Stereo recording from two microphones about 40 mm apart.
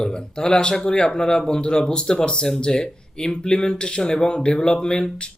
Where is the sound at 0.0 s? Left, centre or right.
Centre.